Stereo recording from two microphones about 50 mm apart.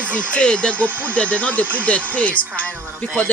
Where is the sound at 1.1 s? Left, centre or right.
Left.